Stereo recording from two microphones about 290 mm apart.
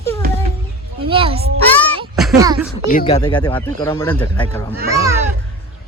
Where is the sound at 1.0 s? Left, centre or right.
Centre.